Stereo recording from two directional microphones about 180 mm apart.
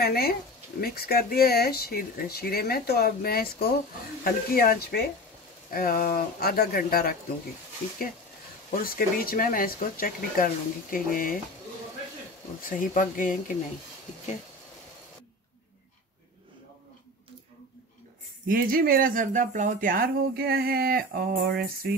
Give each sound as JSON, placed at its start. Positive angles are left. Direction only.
{"t": 0.0, "sound": "speech", "side_deg": 60}
{"t": 8.7, "sound": "speech", "side_deg": 55}
{"t": 12.6, "sound": "speech", "side_deg": 50}
{"t": 18.5, "sound": "speech", "side_deg": -50}